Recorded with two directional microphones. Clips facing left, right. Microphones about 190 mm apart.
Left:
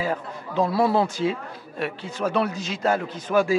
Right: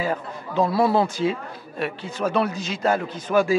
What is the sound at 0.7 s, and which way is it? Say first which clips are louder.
Speech: right 1 dB; 25° right (ahead or behind).